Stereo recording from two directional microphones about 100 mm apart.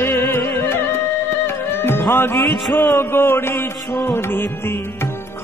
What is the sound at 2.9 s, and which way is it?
Mantra, 25° left (ahead or behind).